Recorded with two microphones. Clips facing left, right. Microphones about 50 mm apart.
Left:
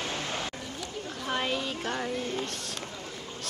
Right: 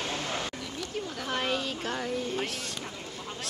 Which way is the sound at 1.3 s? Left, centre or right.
Centre.